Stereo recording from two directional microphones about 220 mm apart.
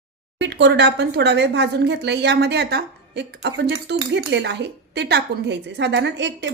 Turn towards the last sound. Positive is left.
turn(degrees=-55)  # may be behind; listen again after turning